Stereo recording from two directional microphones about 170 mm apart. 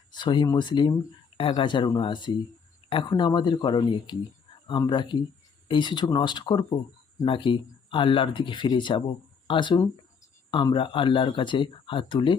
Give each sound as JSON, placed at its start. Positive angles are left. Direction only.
{"t": 0.1, "sound": "speech", "side_deg": 25}